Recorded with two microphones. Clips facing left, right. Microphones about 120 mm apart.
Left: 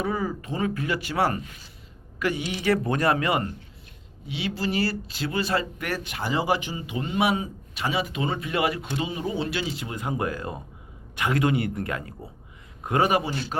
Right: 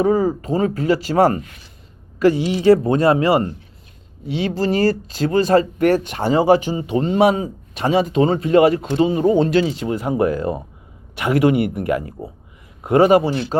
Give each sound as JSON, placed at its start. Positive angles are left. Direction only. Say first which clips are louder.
{"t": 0.0, "sound": "a woman's voice", "louder": "right 11 dB", "side_deg": -40}
{"t": 4.3, "sound": "speech", "louder": "right 9 dB", "side_deg": -45}
{"t": 12.9, "sound": "speech", "louder": "right 10 dB", "side_deg": -35}